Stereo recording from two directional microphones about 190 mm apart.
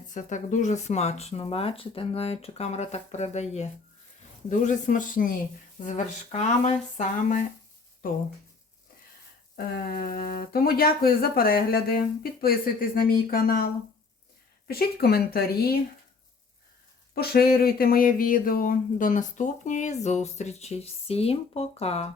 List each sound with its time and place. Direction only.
0.1 s speech: 40° left (ahead or behind)
9.9 s speech: 50° left (ahead or behind)
14.7 s speech: 55° left (ahead or behind)
17.2 s speech: 55° left (ahead or behind); by 22.1 s 35° left (ahead or behind)